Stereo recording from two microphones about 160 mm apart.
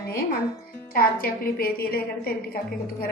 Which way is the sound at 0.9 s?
65° left (ahead or behind).